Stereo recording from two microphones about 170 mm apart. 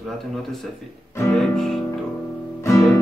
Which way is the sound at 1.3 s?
5° left (ahead or behind).